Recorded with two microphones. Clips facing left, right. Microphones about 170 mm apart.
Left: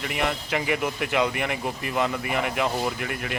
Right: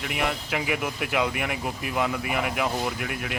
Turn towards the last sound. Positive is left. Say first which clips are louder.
# left 1 dB
turn(degrees=-5)  # may be behind; listen again after turning